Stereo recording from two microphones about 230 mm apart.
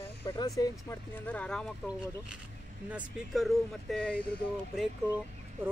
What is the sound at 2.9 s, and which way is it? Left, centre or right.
Speech, centre.